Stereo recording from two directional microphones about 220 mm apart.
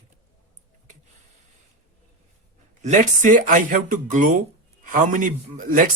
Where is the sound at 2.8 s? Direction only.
35° right (ahead or behind).